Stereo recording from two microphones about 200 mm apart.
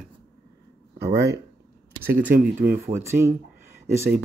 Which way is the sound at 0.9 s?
55° right (ahead or behind).